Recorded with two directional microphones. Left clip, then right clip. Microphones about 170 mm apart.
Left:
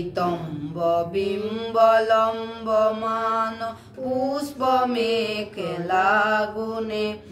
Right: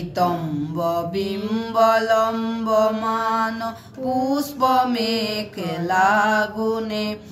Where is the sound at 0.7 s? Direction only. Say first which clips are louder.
Left 1 dB; 15° left (ahead or behind).